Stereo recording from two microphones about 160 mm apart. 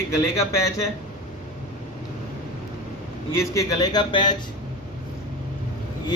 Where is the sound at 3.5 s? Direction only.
20° left (ahead or behind).